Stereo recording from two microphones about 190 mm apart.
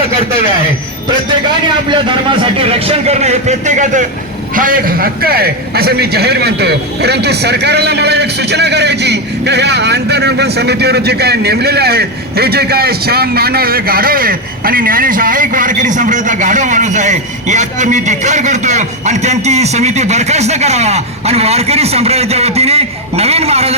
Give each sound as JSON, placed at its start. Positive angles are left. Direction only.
{"t": 1.6, "sound": "a man's voice", "side_deg": -25}